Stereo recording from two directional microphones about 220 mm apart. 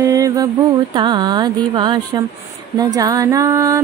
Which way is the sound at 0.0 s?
15° right (ahead or behind).